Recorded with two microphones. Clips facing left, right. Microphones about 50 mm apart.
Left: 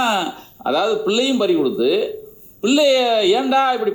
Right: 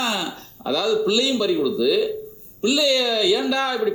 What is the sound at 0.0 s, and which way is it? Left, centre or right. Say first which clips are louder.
Speech: left 6 dB; left.